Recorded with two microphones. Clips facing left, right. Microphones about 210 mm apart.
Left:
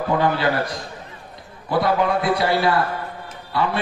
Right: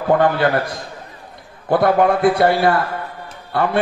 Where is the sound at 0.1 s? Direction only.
55° right (ahead or behind).